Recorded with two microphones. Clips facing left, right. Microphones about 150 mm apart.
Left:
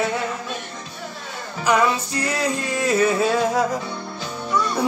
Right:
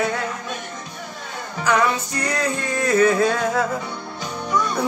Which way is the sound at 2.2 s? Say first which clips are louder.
Even; 10° left (ahead or behind).